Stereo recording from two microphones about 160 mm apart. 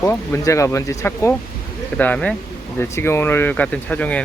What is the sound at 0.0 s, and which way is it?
Speech, 15° left (ahead or behind).